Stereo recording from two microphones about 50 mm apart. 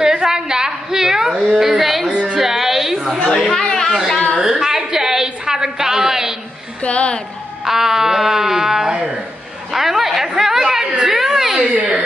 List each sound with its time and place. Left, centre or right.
0.0 s a sound: centre
1.5 s a woman's voice: centre
2.0 s music: right
2.3 s a sound: centre
3.3 s speech: centre
3.6 s a sound: centre
4.4 s a woman's voice: centre
6.8 s a woman's voice: left
7.6 s speech: centre
11.7 s speech: right